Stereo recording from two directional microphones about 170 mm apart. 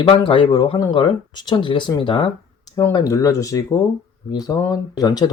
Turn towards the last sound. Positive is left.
turn(degrees=25)  # may be behind; listen again after turning